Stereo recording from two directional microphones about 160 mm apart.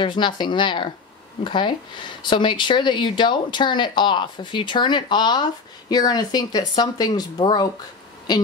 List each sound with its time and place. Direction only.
0.0 s speech: 30° left (ahead or behind)